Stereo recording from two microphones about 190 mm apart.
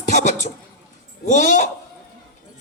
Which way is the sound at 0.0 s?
40° left (ahead or behind).